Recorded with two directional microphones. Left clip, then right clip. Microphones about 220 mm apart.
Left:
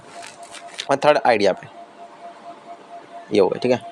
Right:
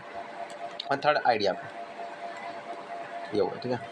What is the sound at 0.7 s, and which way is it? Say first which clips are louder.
Speech: left 9 dB; 40° left (ahead or behind).